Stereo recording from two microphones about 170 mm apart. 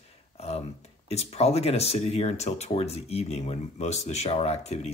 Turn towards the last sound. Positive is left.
turn(degrees=40)  # may be behind; listen again after turning